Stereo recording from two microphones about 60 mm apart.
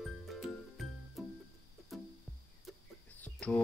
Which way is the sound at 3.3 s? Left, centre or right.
Centre.